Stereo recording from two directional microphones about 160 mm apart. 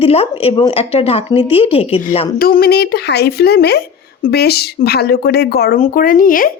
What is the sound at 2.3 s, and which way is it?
Speech, 70° left (ahead or behind).